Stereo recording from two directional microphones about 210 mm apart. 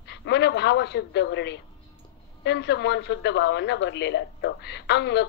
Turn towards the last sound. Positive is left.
turn(degrees=55)  # may be behind; listen again after turning